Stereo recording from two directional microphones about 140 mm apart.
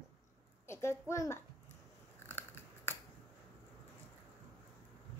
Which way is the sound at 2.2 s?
15° left (ahead or behind).